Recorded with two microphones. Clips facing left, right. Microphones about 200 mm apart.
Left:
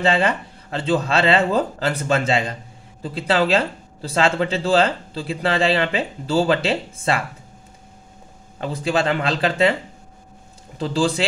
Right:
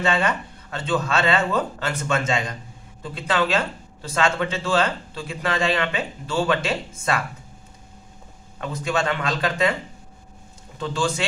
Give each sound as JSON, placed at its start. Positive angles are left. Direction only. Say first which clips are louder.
{"t": 0.0, "sound": "speech", "louder": "left 3 dB", "side_deg": 30}
{"t": 8.5, "sound": "speech", "louder": "left 3 dB", "side_deg": 30}
{"t": 10.8, "sound": "speech", "louder": "left 4 dB", "side_deg": 35}